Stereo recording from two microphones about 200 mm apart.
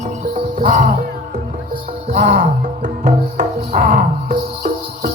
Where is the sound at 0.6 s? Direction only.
45° right (ahead or behind).